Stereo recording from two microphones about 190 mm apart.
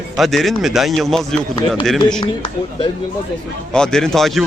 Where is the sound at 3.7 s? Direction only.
5° left (ahead or behind).